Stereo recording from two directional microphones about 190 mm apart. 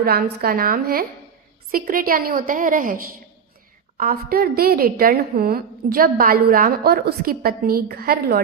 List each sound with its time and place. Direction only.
0.0 s a woman's voice: 55° right (ahead or behind)